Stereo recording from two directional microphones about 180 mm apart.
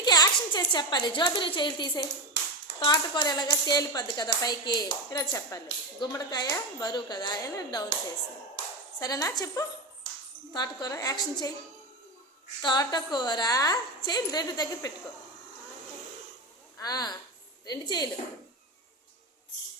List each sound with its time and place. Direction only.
0.0 s a sound: 25° left (ahead or behind)
0.7 s a woman's voice: 25° left (ahead or behind)
9.0 s a woman's voice: 20° left (ahead or behind)
12.6 s a woman's voice: 25° left (ahead or behind)
16.7 s a woman's voice: 20° left (ahead or behind)